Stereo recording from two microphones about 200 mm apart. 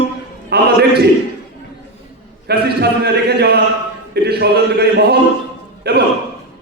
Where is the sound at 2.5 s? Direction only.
55° right (ahead or behind).